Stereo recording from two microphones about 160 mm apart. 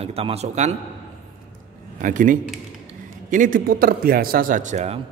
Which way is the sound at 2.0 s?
55° right (ahead or behind).